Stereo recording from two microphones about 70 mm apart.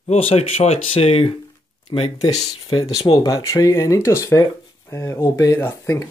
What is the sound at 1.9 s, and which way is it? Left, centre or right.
Speech, left.